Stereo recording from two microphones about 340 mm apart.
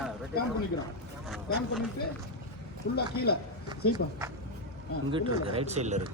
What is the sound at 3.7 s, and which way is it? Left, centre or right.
Speech, centre.